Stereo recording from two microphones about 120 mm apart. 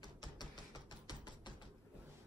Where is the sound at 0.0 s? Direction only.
35° left (ahead or behind).